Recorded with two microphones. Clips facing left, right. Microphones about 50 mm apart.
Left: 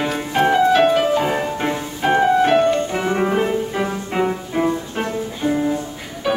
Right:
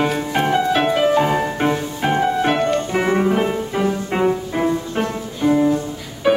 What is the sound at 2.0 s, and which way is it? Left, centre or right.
Music, centre.